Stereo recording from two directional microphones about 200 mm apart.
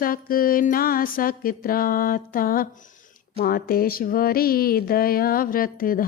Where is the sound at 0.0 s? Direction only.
45° left (ahead or behind).